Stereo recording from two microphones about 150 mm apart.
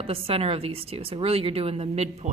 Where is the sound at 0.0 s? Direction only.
40° right (ahead or behind).